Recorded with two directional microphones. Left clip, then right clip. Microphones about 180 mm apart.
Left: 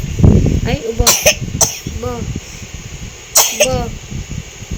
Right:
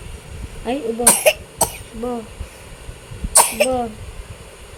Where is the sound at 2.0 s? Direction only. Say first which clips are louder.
Left 1 dB; 5° left (ahead or behind).